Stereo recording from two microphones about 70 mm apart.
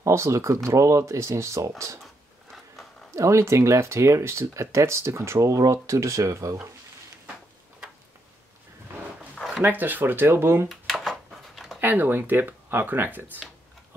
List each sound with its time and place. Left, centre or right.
0.0 s speech: right
2.5 s a sound: centre
3.2 s speech: right
9.6 s speech: right
10.7 s a sound: centre
11.8 s speech: right